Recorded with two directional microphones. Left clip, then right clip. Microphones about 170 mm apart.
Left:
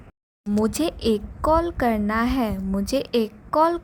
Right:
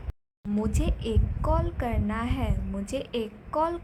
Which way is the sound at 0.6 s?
45° left (ahead or behind).